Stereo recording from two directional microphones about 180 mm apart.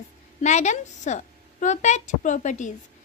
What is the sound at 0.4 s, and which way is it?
A woman's voice, 40° left (ahead or behind).